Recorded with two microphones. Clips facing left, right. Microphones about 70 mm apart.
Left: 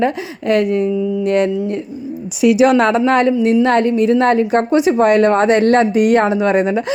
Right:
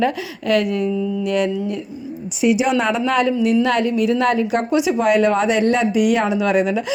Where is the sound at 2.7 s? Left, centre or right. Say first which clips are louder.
Left 6 dB; left.